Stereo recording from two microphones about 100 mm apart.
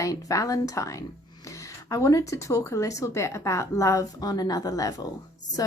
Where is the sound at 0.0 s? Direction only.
35° left (ahead or behind).